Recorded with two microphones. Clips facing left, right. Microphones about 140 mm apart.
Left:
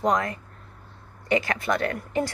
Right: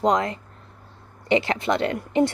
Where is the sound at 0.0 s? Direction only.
20° right (ahead or behind).